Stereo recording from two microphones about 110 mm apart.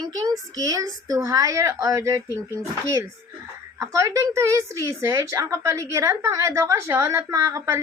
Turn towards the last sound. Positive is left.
turn(degrees=-35)  # may be behind; listen again after turning